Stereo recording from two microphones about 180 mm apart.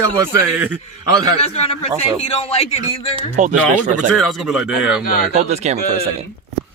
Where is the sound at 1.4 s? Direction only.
35° left (ahead or behind).